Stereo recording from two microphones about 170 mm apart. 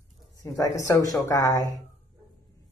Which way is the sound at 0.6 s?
20° left (ahead or behind).